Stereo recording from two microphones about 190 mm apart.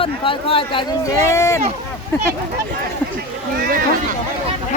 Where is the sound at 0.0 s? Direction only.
30° left (ahead or behind).